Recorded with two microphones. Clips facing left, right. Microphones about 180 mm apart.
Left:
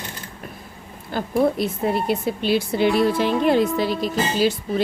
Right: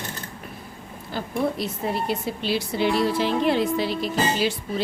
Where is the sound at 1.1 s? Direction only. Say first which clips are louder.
Left 6 dB; 50° left (ahead or behind).